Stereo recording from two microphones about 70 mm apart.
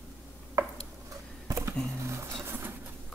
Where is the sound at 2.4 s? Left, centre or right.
Right.